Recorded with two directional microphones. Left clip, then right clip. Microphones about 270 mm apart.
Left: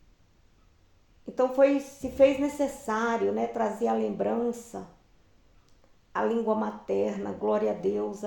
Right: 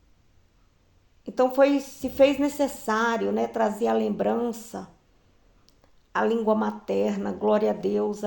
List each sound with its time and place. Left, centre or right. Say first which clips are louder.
1.2 s a woman's voice: right 2 dB; right
6.1 s a woman's voice: right 4 dB; right